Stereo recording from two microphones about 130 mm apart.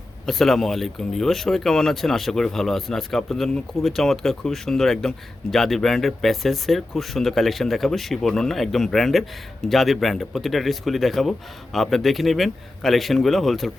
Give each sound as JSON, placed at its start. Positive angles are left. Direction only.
{"t": 0.3, "sound": "speech", "side_deg": 0}